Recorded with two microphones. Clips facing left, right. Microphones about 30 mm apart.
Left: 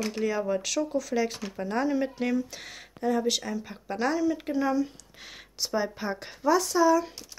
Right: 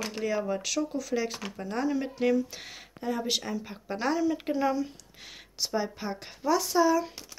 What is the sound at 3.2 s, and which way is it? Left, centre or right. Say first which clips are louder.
Speech: left 2 dB; centre.